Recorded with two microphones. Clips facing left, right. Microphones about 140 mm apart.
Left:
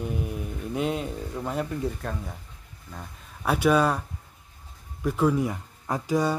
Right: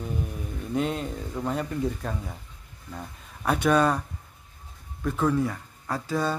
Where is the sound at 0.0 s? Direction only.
5° left (ahead or behind).